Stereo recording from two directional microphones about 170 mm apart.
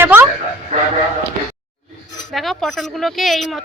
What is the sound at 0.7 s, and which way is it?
Speech, 40° right (ahead or behind).